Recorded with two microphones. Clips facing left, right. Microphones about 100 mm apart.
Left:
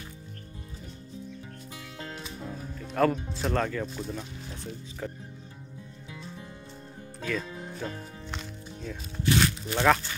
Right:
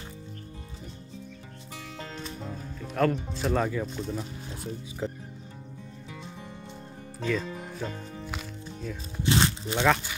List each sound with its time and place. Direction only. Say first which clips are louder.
2.2 s speech: right 1 dB; centre (ahead or behind)
5.0 s speech: right 4 dB; 20° right (ahead or behind)
7.2 s music: right 3 dB; 5° right (ahead or behind)
9.2 s speech: even; 25° right (ahead or behind)